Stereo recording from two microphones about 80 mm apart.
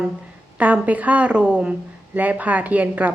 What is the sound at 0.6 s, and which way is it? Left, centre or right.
Speech, centre.